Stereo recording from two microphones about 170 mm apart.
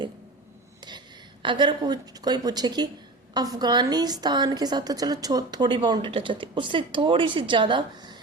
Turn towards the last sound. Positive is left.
turn(degrees=-30)  # may be behind; listen again after turning